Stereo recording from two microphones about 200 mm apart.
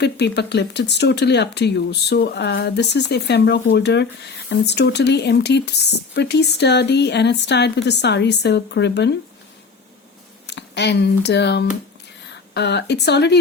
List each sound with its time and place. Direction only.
0.0 s speech: 55° left (ahead or behind)
10.4 s speech: 60° left (ahead or behind)